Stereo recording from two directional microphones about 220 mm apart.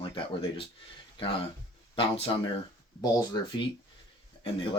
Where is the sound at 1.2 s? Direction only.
25° left (ahead or behind).